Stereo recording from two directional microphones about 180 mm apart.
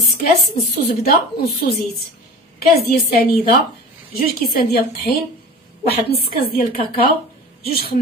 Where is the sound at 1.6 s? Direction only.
60° left (ahead or behind).